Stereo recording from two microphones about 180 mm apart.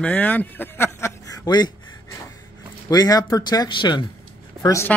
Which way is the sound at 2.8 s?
20° left (ahead or behind).